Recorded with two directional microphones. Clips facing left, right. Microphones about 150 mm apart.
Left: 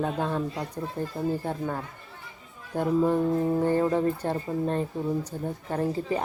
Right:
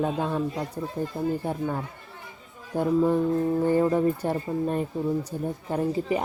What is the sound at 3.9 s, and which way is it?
Speech, 10° right (ahead or behind).